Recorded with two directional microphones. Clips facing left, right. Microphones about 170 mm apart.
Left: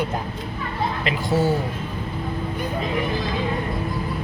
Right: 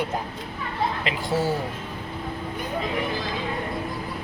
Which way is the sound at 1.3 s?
25° left (ahead or behind).